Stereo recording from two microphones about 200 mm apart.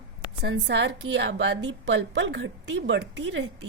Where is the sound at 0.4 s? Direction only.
65° right (ahead or behind).